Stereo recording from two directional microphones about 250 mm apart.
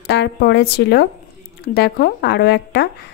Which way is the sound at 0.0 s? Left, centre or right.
Left.